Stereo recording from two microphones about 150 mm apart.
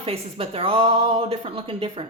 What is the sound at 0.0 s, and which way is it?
Speech, 40° right (ahead or behind).